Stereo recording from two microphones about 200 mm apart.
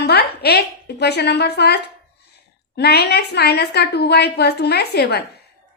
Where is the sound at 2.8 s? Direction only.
55° left (ahead or behind).